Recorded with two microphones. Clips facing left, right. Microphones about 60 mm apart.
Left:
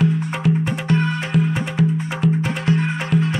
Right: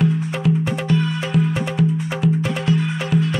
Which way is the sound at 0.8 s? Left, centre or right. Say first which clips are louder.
Left 1 dB; left.